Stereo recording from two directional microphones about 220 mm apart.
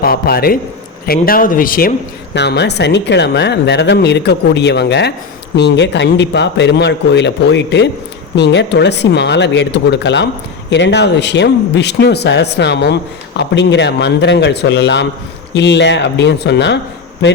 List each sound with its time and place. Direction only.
0.0 s speech: 45° left (ahead or behind)
2.3 s speech: 50° left (ahead or behind)